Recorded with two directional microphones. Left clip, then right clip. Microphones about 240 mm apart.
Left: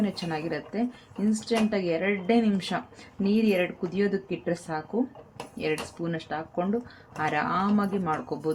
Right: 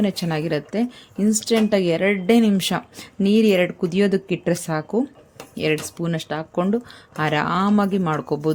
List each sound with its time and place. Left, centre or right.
0.0 s speech: right